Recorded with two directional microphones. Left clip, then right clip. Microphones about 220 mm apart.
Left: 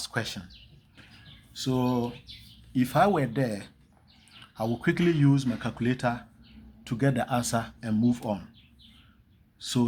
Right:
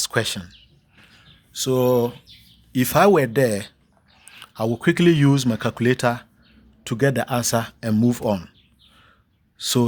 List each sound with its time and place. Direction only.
0.0 s speech: 45° right (ahead or behind)
1.5 s speech: 50° right (ahead or behind)
4.3 s a sound: 45° right (ahead or behind)
4.8 s speech: 40° right (ahead or behind)
9.6 s speech: 50° right (ahead or behind)